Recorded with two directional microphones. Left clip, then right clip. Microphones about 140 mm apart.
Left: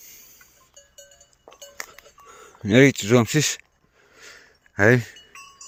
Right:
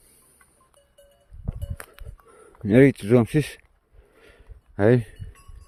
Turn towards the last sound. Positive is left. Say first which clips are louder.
# left 2 dB
turn(degrees=-35)  # may be behind; listen again after turning